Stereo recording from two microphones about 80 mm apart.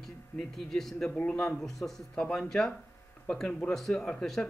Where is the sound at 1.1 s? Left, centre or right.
Centre.